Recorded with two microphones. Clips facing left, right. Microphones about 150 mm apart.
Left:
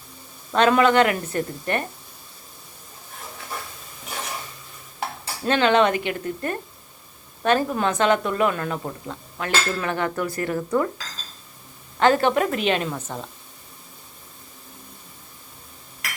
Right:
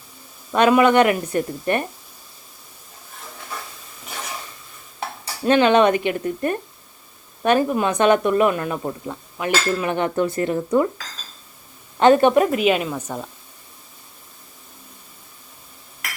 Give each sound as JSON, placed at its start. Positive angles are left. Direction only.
{"t": 0.5, "sound": "a woman's voice", "side_deg": -15}
{"t": 5.5, "sound": "a woman's voice", "side_deg": -20}
{"t": 11.9, "sound": "a woman's voice", "side_deg": -20}